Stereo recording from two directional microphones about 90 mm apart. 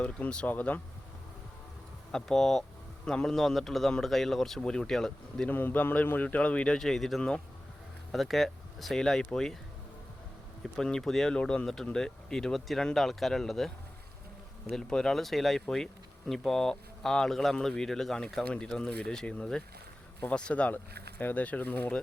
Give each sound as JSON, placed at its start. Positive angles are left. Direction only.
{"t": 0.0, "sound": "a man's voice", "side_deg": 10}
{"t": 2.1, "sound": "a man's voice", "side_deg": 5}
{"t": 5.5, "sound": "a man's voice", "side_deg": 20}
{"t": 10.6, "sound": "a man's voice", "side_deg": 5}